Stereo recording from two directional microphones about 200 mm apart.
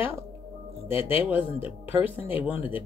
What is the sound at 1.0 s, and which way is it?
Speech, 25° left (ahead or behind).